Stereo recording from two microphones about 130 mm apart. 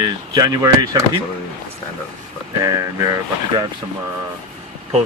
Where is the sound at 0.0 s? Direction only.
30° right (ahead or behind).